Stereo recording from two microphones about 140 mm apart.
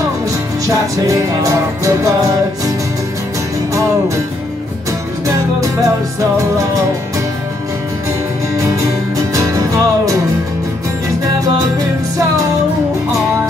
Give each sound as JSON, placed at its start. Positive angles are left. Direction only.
{"t": 1.0, "sound": "music", "side_deg": -20}
{"t": 9.3, "sound": "music", "side_deg": -25}